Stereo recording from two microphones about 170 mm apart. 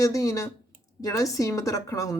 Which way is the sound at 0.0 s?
20° left (ahead or behind).